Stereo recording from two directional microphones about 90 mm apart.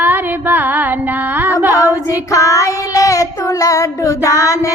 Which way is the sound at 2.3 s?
35° left (ahead or behind).